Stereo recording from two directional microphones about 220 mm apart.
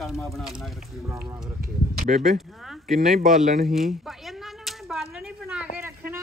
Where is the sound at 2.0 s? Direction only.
35° right (ahead or behind).